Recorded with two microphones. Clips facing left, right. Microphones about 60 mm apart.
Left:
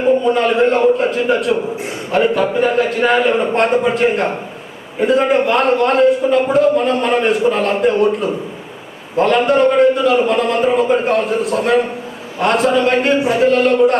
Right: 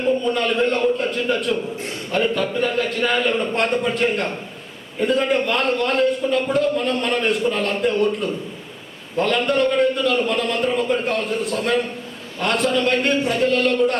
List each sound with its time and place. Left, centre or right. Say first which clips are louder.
0.0 s a man's voice: left 6 dB; centre
9.2 s a man's voice: left 7 dB; centre